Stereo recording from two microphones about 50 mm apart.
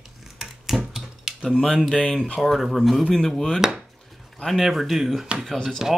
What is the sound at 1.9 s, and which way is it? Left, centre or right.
Speech, centre.